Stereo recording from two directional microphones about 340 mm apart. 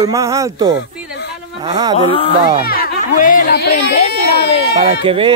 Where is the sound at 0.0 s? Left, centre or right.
Centre.